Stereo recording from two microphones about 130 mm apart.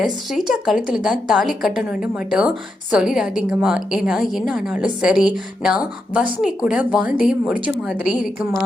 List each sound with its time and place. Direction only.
0.0 s a woman's voice: 5° right (ahead or behind)